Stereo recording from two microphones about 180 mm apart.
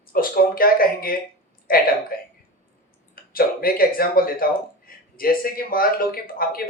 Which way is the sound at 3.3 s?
55° left (ahead or behind).